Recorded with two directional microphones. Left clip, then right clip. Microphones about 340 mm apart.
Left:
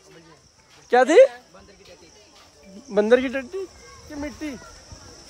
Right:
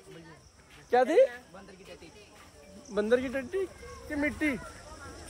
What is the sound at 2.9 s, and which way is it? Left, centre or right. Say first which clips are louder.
Speech: left 9 dB; centre.